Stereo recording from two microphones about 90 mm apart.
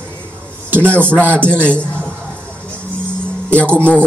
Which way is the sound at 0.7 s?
25° right (ahead or behind).